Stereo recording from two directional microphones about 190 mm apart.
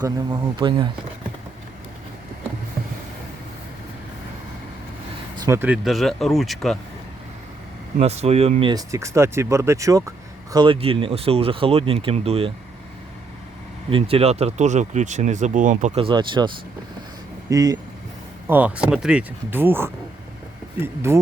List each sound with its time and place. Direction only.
0.0 s speech: 25° right (ahead or behind)
5.5 s speech: 10° right (ahead or behind)
7.9 s speech: 35° right (ahead or behind)
8.7 s speech: 15° right (ahead or behind); by 12.5 s 30° right (ahead or behind)
13.9 s speech: 30° right (ahead or behind)
16.0 s speech: 25° right (ahead or behind)
17.5 s speech: 20° right (ahead or behind)